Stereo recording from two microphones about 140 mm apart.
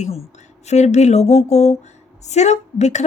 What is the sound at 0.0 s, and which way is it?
A woman's voice, 50° left (ahead or behind).